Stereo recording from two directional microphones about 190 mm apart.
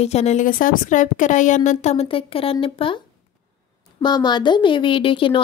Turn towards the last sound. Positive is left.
turn(degrees=25)  # may be behind; listen again after turning